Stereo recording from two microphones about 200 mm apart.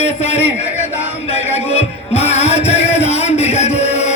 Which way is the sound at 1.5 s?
30° left (ahead or behind).